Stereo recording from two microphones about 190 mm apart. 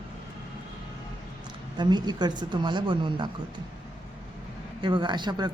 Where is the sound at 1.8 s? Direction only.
20° right (ahead or behind).